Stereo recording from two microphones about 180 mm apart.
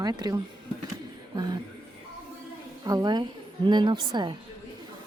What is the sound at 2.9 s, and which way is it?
Speech, 20° right (ahead or behind).